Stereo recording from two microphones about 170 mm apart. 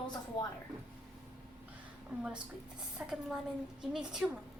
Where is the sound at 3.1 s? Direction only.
5° right (ahead or behind).